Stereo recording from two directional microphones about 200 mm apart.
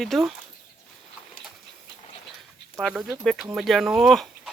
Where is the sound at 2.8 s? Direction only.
5° right (ahead or behind).